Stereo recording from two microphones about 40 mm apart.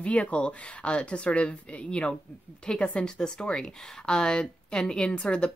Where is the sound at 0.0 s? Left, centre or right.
Left.